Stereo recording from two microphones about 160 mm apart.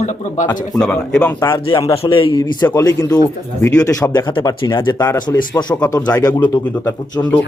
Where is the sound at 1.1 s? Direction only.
10° left (ahead or behind).